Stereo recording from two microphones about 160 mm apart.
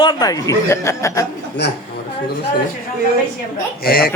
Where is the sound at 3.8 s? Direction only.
70° left (ahead or behind).